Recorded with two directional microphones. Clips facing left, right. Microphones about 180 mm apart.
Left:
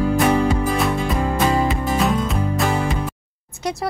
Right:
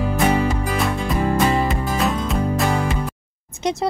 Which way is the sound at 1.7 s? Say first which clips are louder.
Left 2 dB; centre (ahead or behind).